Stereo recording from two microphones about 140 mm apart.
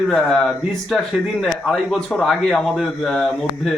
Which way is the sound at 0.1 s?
Centre (ahead or behind).